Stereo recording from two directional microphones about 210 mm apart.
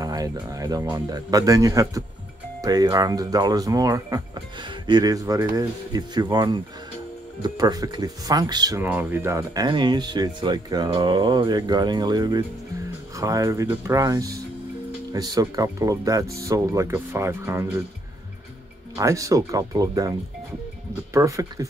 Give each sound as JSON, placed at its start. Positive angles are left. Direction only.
{"t": 0.0, "sound": "speech", "side_deg": -15}
{"t": 18.9, "sound": "speech", "side_deg": -15}